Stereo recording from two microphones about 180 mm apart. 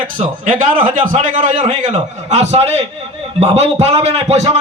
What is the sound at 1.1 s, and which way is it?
A man's voice, 40° right (ahead or behind).